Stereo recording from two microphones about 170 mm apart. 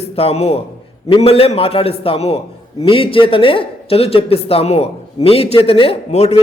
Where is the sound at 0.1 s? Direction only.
35° left (ahead or behind).